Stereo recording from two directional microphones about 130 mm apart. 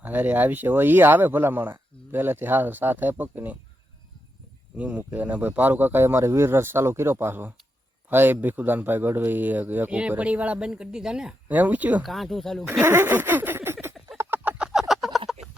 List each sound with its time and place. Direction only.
0.0 s a man's voice: 15° right (ahead or behind)
4.8 s a man's voice: 10° right (ahead or behind)
12.0 s speech: centre (ahead or behind)
12.8 s a sound: 15° right (ahead or behind)